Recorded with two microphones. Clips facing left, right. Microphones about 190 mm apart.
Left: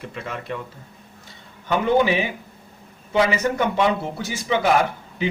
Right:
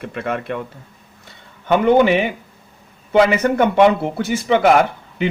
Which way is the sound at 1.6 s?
60° right (ahead or behind).